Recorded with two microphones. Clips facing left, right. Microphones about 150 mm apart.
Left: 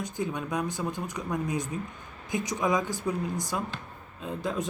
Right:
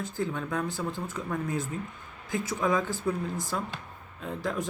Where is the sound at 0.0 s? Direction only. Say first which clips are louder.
Even; 15° left (ahead or behind).